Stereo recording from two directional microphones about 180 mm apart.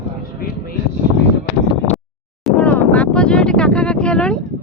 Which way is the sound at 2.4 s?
5° left (ahead or behind).